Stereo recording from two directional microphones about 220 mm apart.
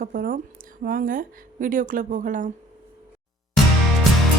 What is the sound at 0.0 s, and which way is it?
Speech, 40° right (ahead or behind).